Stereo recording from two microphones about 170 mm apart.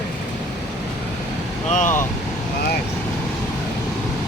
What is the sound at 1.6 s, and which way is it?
Speech, 50° left (ahead or behind).